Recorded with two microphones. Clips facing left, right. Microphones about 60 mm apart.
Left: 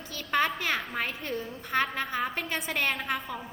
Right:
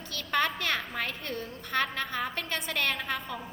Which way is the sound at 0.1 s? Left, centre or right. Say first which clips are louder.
Left 1 dB; centre.